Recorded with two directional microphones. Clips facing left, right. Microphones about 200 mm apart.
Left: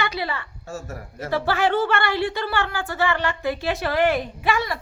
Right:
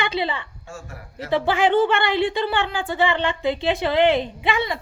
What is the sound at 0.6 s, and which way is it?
Speech, 40° left (ahead or behind).